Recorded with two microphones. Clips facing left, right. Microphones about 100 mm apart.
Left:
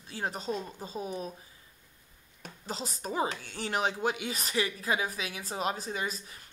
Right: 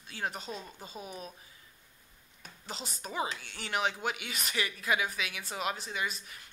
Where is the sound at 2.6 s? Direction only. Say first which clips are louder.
Left 5 dB; 35° left (ahead or behind).